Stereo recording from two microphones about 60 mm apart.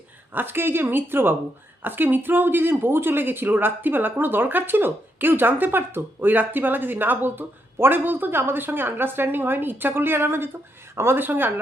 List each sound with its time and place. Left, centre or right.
0.3 s speech: right